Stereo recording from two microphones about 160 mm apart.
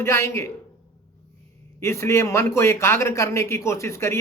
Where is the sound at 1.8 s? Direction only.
15° left (ahead or behind).